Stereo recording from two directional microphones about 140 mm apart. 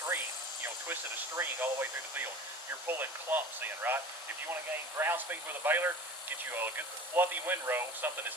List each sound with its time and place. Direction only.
1.4 s speech: 15° right (ahead or behind)